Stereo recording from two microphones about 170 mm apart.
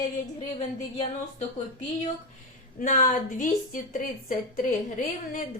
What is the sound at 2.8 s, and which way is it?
A woman's voice, 45° left (ahead or behind).